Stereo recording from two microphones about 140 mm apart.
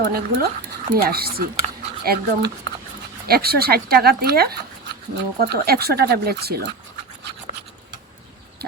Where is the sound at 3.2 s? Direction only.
90° right.